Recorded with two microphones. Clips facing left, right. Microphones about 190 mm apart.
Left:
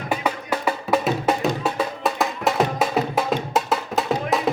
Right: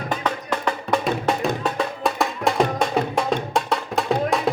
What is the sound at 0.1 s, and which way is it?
Music, 10° left (ahead or behind).